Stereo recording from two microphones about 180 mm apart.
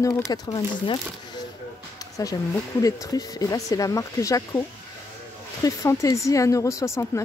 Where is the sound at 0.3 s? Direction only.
25° left (ahead or behind).